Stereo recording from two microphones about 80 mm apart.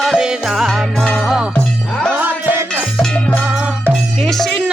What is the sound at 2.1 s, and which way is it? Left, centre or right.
Music, right.